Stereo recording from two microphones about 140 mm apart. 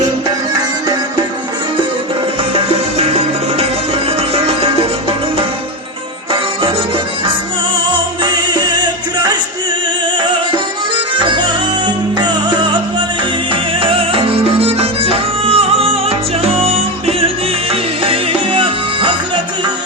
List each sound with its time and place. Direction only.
3.0 s music: 45° right (ahead or behind)
6.3 s music: 35° right (ahead or behind)
8.2 s music: 30° right (ahead or behind)
11.2 s music: 35° right (ahead or behind)